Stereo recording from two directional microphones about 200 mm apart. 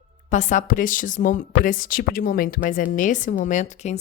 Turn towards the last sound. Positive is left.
turn(degrees=35)  # may be behind; listen again after turning